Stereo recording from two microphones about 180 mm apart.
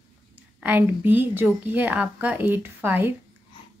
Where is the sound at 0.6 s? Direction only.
10° right (ahead or behind).